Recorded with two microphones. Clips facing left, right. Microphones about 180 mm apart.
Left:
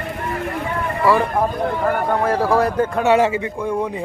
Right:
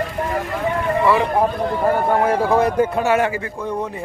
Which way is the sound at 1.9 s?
25° right (ahead or behind).